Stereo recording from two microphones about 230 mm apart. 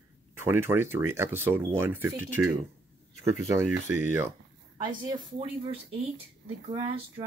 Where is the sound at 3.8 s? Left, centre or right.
Centre.